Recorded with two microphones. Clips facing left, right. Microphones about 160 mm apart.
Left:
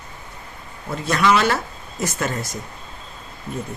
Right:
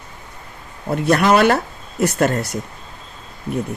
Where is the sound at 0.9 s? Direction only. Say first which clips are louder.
Right 4 dB; 60° right (ahead or behind).